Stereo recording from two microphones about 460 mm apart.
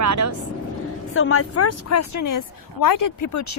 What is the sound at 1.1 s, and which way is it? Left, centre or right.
A woman's voice, left.